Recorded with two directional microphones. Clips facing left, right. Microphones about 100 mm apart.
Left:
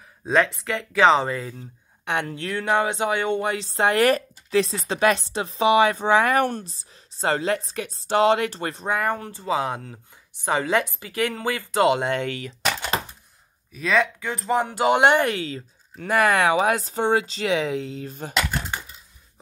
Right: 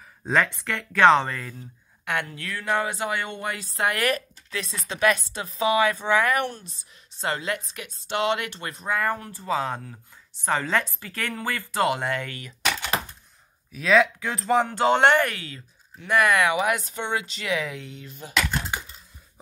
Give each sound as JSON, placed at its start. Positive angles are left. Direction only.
{"t": 0.4, "sound": "speech", "side_deg": 5}
{"t": 2.3, "sound": "speech", "side_deg": 25}
{"t": 6.4, "sound": "speech", "side_deg": 40}
{"t": 13.7, "sound": "speech", "side_deg": 0}
{"t": 14.7, "sound": "speech", "side_deg": 15}